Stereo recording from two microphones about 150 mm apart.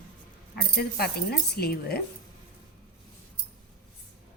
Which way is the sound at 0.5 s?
90° left.